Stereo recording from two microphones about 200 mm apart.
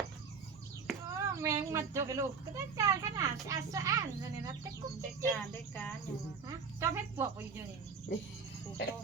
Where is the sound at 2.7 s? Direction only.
15° right (ahead or behind).